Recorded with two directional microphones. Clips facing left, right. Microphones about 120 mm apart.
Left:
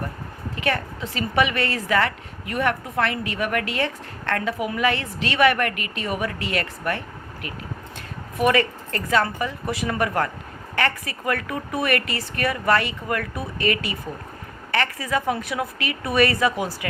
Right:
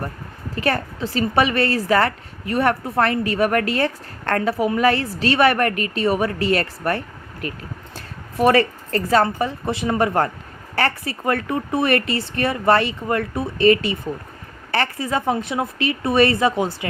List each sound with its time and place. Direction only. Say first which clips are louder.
0.5 s a woman's voice: right 3 dB; 35° right (ahead or behind)